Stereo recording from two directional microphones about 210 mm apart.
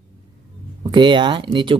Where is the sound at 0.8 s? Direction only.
20° right (ahead or behind).